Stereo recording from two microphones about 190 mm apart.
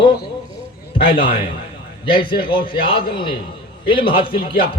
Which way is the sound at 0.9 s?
25° left (ahead or behind).